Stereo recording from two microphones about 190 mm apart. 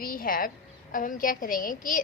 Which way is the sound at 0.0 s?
50° left (ahead or behind).